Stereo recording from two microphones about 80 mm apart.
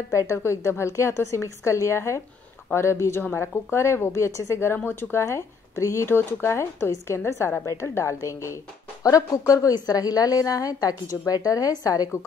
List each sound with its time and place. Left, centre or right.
0.1 s speech: left
5.2 s a woman's voice: left